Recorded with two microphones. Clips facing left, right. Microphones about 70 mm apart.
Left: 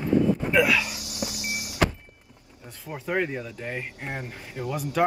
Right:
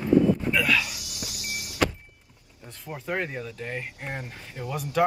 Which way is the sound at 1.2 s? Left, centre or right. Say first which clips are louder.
Left 8 dB; left.